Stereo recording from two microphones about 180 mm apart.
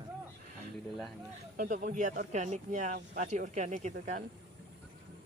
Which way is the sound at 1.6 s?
50° right (ahead or behind).